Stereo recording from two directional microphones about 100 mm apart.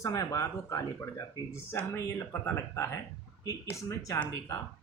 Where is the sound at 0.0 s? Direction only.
30° left (ahead or behind).